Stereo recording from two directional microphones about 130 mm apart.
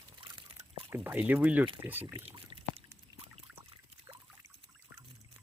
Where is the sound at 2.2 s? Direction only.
45° right (ahead or behind).